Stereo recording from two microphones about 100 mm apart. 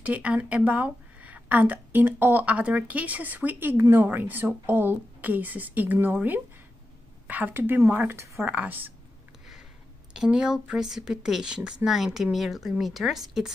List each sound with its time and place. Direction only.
0.0 s a woman's voice: 15° right (ahead or behind)
10.1 s speech: 5° right (ahead or behind)